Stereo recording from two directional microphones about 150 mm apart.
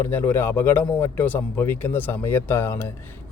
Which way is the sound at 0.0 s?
15° left (ahead or behind).